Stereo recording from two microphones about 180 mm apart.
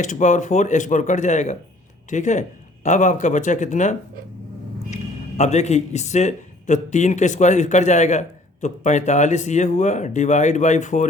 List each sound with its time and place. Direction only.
0.0 s a man's voice: 45° left (ahead or behind)
5.4 s a man's voice: 40° left (ahead or behind)